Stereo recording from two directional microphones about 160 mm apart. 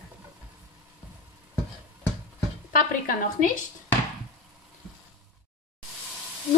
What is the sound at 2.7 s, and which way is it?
Speech, 60° left (ahead or behind).